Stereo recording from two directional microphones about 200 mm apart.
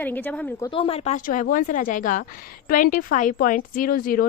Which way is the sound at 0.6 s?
25° left (ahead or behind).